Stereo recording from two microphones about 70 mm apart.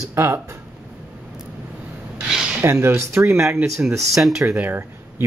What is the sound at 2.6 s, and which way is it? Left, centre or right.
Speech, right.